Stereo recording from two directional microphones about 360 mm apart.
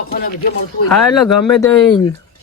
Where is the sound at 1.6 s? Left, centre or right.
Centre.